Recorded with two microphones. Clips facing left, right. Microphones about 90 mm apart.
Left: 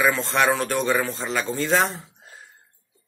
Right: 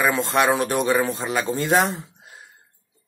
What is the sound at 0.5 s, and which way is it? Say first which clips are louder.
Speech: right 2 dB; 15° right (ahead or behind).